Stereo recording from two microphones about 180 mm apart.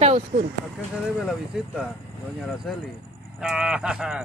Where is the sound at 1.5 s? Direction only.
5° right (ahead or behind).